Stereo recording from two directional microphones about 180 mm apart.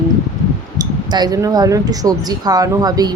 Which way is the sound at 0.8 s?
20° right (ahead or behind).